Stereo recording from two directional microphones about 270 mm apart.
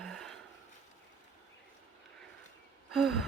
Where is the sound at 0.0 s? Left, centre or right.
Centre.